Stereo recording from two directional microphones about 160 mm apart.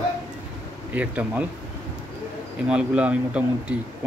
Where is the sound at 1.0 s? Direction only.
10° right (ahead or behind).